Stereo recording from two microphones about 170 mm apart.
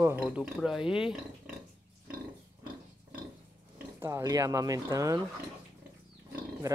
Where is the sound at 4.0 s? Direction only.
15° right (ahead or behind).